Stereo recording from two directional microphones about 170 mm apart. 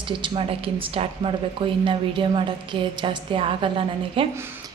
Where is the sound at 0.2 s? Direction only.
35° right (ahead or behind).